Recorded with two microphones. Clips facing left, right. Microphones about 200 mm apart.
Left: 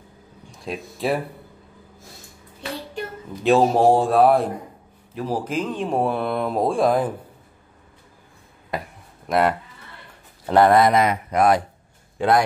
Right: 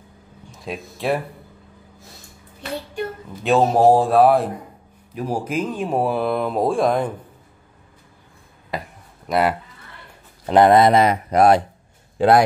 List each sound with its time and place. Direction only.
0.5 s speech: centre (ahead or behind)
3.4 s speech: centre (ahead or behind)
5.1 s speech: 10° right (ahead or behind)
8.7 s a sound: centre (ahead or behind)
9.3 s speech: 5° right (ahead or behind)
10.4 s a man's voice: 20° right (ahead or behind)